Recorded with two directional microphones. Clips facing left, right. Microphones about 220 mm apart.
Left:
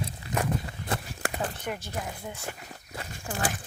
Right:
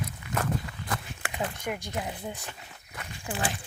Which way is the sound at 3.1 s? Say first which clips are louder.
Even; 45° left (ahead or behind).